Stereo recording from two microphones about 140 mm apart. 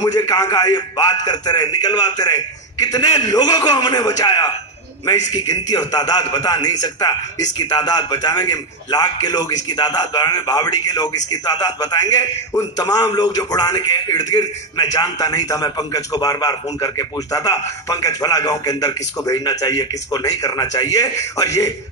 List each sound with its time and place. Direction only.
0.0 s a man's voice: 30° left (ahead or behind)
5.7 s a man's voice: 25° left (ahead or behind)